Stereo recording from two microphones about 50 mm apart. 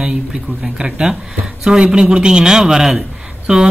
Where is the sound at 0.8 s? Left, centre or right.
Centre.